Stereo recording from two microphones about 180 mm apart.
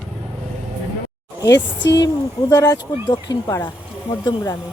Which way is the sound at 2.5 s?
20° left (ahead or behind).